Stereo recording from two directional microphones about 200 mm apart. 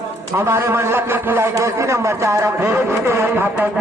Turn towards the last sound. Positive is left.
turn(degrees=-10)  # may be behind; listen again after turning